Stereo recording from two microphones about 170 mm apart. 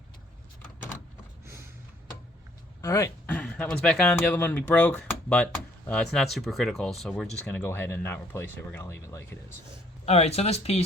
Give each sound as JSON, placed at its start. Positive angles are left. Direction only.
{"t": 1.5, "sound": "a sound", "side_deg": -15}
{"t": 2.8, "sound": "speech", "side_deg": 20}
{"t": 10.1, "sound": "speech", "side_deg": 40}